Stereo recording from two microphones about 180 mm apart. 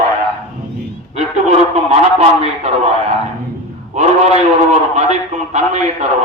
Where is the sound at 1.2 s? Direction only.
35° right (ahead or behind).